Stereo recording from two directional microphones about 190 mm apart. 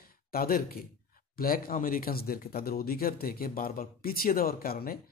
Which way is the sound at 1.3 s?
50° left (ahead or behind).